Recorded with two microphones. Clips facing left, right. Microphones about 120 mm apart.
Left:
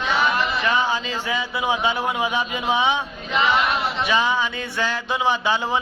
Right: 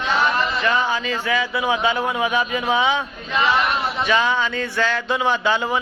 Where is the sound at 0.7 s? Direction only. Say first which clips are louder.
Right 1 dB; 20° left (ahead or behind).